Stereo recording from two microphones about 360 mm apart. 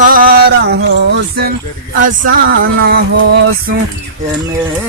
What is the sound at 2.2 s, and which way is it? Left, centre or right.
Music, right.